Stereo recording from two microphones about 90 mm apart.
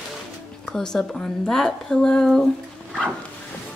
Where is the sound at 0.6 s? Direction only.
5° left (ahead or behind).